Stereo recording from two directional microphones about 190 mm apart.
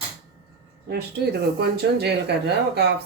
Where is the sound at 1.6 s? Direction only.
60° right (ahead or behind).